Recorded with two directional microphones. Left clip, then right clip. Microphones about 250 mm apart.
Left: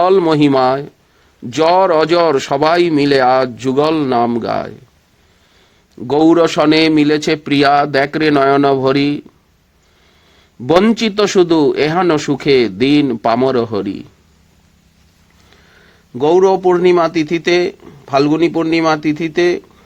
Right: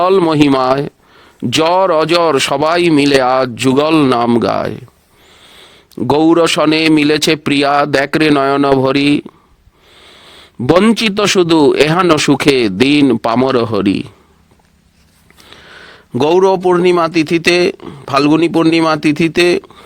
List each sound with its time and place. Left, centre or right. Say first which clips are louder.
0.0 s speech: right 1 dB; right
5.9 s speech: right 1 dB; right
15.4 s speech: right 11 dB; right